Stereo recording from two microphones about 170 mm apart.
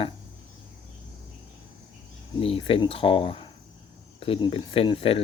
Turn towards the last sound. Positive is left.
turn(degrees=35)  # may be behind; listen again after turning